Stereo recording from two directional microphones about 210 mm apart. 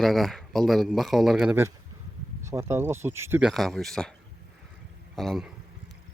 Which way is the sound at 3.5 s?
Centre (ahead or behind).